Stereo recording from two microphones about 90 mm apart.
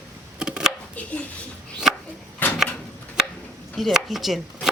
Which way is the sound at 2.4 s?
20° left (ahead or behind).